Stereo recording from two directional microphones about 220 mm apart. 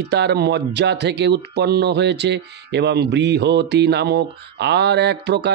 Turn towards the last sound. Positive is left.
turn(degrees=-50)  # may be behind; listen again after turning